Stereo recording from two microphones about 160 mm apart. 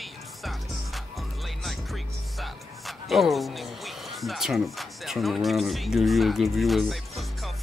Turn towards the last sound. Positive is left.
turn(degrees=0)  # may be behind; listen again after turning